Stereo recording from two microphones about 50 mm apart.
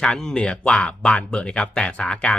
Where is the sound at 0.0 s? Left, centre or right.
Centre.